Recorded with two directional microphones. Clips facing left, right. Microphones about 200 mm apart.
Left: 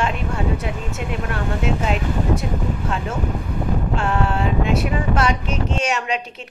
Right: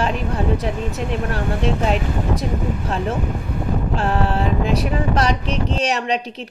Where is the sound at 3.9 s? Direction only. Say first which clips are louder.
Right 2 dB; 35° right (ahead or behind).